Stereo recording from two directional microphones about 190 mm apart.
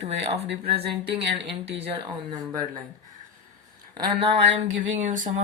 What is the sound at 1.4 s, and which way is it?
Speech, 65° right (ahead or behind).